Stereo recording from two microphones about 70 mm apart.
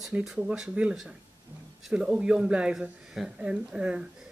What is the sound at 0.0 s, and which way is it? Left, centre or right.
Speech, centre.